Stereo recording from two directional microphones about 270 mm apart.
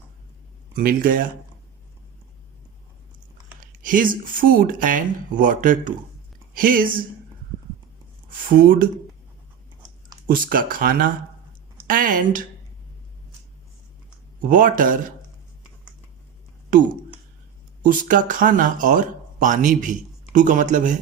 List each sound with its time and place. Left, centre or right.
0.8 s speech: right
3.6 s speech: right
8.3 s speech: right
10.2 s speech: right
14.5 s speech: right
17.8 s speech: right